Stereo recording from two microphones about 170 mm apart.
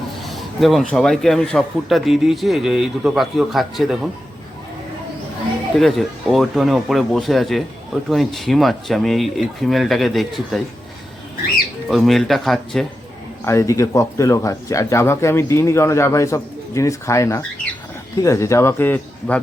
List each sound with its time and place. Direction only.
0.2 s a man's voice: centre (ahead or behind)
5.7 s a man's voice: centre (ahead or behind)
11.9 s a man's voice: centre (ahead or behind)
13.4 s speech: 15° left (ahead or behind)